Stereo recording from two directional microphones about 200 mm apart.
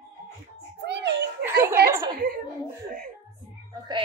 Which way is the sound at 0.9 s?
60° right (ahead or behind).